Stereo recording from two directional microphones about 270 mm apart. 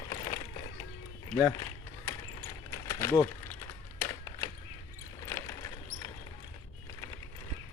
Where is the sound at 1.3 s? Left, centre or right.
Centre.